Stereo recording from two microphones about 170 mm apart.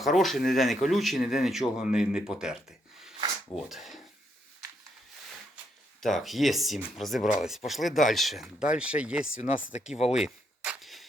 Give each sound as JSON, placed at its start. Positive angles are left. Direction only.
{"t": 0.0, "sound": "speech", "side_deg": 0}
{"t": 2.3, "sound": "a sound", "side_deg": -5}
{"t": 3.5, "sound": "speech", "side_deg": 0}
{"t": 6.0, "sound": "speech", "side_deg": 0}
{"t": 7.2, "sound": "speech", "side_deg": 45}
{"t": 7.4, "sound": "speech", "side_deg": 0}
{"t": 9.9, "sound": "speech", "side_deg": 40}
{"t": 10.2, "sound": "a sound", "side_deg": -5}